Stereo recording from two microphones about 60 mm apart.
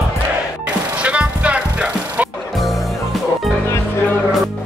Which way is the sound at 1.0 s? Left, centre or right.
Right.